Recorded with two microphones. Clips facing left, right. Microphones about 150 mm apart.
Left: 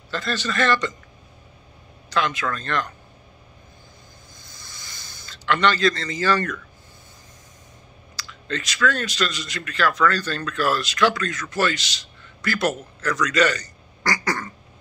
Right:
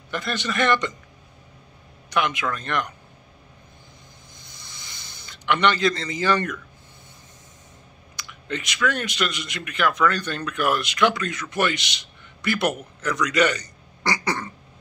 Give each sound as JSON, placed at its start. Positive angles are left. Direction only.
{"t": 0.1, "sound": "speech", "side_deg": -20}
{"t": 2.0, "sound": "speech", "side_deg": -20}
{"t": 4.4, "sound": "a sound", "side_deg": -20}
{"t": 8.2, "sound": "a man's voice", "side_deg": -15}